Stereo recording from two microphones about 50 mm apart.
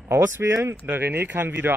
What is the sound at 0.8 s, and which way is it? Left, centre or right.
Speech, right.